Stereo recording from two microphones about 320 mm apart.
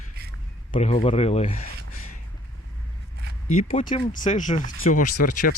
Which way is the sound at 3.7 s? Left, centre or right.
Centre.